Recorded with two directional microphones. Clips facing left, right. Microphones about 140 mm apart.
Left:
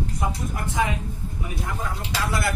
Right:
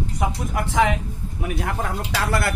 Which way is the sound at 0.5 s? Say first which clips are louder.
Right 7 dB; 90° right.